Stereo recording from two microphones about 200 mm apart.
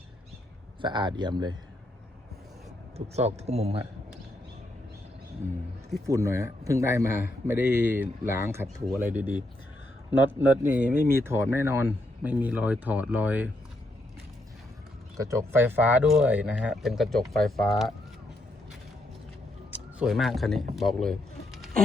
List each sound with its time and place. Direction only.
0.8 s speech: 20° right (ahead or behind)
3.2 s speech: 30° right (ahead or behind)
6.1 s a man's voice: 15° right (ahead or behind)
10.1 s a man's voice: 10° right (ahead or behind)
15.2 s speech: 15° right (ahead or behind)
19.7 s speech: 5° right (ahead or behind)
20.7 s a sound: centre (ahead or behind)